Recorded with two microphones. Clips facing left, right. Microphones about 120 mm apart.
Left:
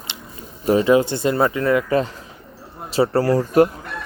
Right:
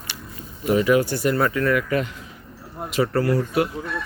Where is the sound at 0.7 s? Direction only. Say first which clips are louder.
Left 3 dB; 30° left (ahead or behind).